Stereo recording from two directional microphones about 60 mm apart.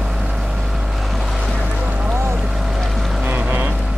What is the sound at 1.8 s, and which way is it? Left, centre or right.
Boat, right.